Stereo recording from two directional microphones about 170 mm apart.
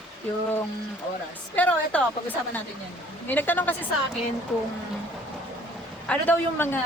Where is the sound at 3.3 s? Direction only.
10° left (ahead or behind).